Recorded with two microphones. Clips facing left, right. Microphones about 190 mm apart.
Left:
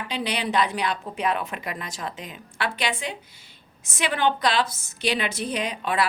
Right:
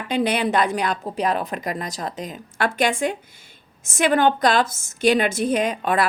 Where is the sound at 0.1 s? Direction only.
50° right (ahead or behind).